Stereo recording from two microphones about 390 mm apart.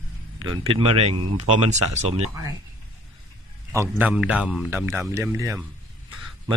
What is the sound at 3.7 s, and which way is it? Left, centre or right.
A man's voice, centre.